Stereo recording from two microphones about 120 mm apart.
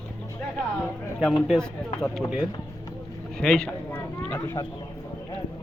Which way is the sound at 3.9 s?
10° left (ahead or behind).